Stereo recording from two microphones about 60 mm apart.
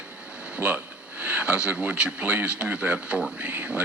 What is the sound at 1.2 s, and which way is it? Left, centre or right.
Speech, centre.